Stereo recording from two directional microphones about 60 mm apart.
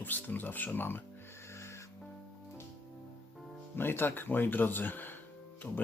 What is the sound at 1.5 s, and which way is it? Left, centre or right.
Music, left.